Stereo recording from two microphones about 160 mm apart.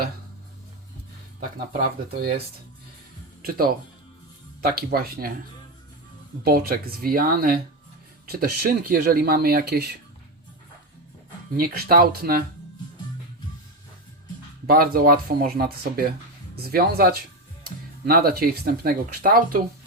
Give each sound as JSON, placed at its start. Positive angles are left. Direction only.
{"t": 1.7, "sound": "speech", "side_deg": -65}
{"t": 4.6, "sound": "speech", "side_deg": -75}
{"t": 6.4, "sound": "speech", "side_deg": -70}
{"t": 11.5, "sound": "speech", "side_deg": -65}
{"t": 14.7, "sound": "speech", "side_deg": -65}